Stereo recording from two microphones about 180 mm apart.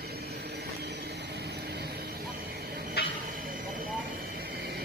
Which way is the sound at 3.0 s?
65° left (ahead or behind).